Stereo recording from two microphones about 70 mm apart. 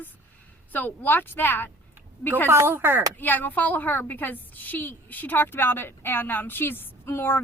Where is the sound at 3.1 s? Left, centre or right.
Left.